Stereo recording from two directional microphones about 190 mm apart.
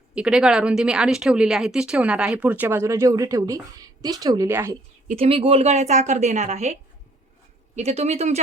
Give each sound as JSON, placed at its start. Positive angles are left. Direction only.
{"t": 0.1, "sound": "speech", "side_deg": -5}
{"t": 5.0, "sound": "a woman's voice", "side_deg": -30}
{"t": 7.8, "sound": "a woman's voice", "side_deg": -35}